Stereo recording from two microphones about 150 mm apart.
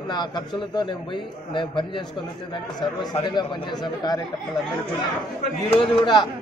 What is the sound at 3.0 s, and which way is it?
Speech, 30° left (ahead or behind).